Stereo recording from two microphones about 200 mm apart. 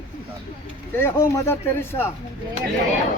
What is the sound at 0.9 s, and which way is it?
A man's voice, 15° left (ahead or behind).